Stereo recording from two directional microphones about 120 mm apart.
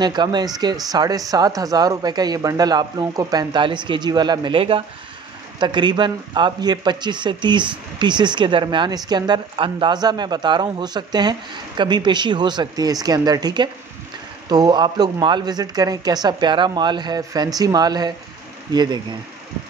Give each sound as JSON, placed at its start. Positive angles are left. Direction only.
{"t": 0.0, "sound": "speech", "side_deg": -35}